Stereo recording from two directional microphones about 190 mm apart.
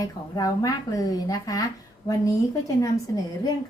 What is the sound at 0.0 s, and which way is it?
A woman's voice, 20° left (ahead or behind).